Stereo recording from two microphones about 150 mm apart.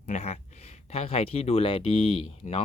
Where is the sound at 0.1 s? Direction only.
45° left (ahead or behind).